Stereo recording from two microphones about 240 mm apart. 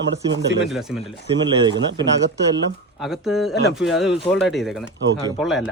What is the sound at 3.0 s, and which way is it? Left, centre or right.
Speech, centre.